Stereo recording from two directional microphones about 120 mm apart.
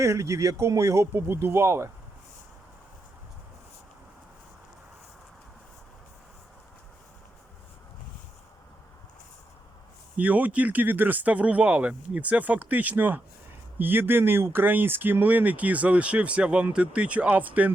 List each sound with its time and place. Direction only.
0.0 s speech: 25° right (ahead or behind)
10.2 s speech: 10° right (ahead or behind)